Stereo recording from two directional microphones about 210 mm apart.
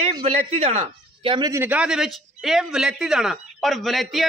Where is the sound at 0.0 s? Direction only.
30° right (ahead or behind).